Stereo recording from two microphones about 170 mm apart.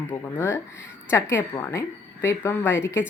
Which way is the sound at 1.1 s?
15° left (ahead or behind).